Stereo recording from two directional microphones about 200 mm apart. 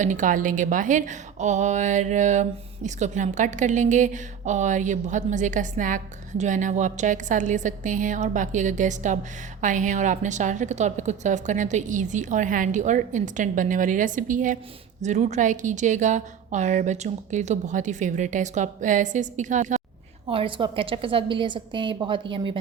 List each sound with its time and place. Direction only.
0.0 s a woman's voice: 40° right (ahead or behind)
20.2 s a woman's voice: 25° right (ahead or behind)